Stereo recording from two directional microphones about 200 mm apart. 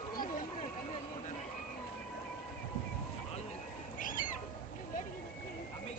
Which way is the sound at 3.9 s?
40° left (ahead or behind).